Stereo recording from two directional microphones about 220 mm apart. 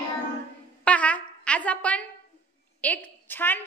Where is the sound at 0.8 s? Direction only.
5° left (ahead or behind).